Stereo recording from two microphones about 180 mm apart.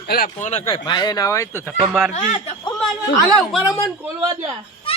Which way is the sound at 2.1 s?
40° left (ahead or behind).